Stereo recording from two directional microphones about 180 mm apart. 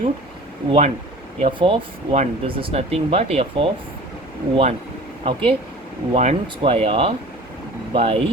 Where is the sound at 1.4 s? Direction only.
30° right (ahead or behind).